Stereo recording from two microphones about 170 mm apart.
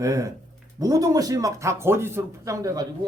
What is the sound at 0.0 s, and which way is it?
Speech, 20° right (ahead or behind).